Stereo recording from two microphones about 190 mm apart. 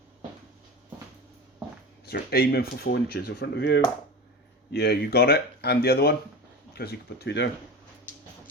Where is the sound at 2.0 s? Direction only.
55° left (ahead or behind).